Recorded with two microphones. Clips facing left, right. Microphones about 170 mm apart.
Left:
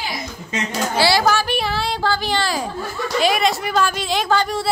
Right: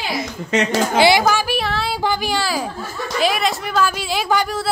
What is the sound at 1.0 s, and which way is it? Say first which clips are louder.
Speech: right 1 dB; 15° right (ahead or behind).